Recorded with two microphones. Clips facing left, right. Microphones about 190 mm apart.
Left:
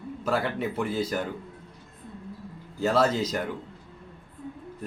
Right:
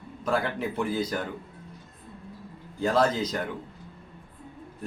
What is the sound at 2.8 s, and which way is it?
Speech, 5° left (ahead or behind).